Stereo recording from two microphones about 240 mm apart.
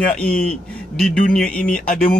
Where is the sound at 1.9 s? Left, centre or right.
Left.